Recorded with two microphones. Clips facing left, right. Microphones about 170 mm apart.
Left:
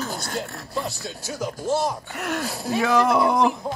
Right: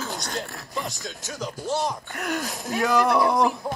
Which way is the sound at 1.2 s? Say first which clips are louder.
Left 4 dB; 10° left (ahead or behind).